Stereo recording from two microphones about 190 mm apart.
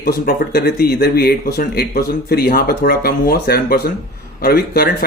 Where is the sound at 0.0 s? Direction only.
50° left (ahead or behind).